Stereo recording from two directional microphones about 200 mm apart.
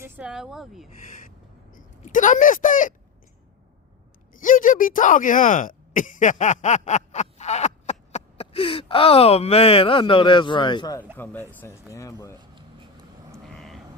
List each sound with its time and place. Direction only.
0.0 s speech: 5° right (ahead or behind)
1.7 s speech: 40° left (ahead or behind)
4.4 s speech: 40° left (ahead or behind); by 11.0 s 20° left (ahead or behind)
11.2 s speech: 10° left (ahead or behind)
13.6 s vehicle: centre (ahead or behind)